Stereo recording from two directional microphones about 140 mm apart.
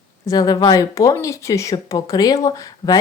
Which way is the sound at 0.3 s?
25° left (ahead or behind).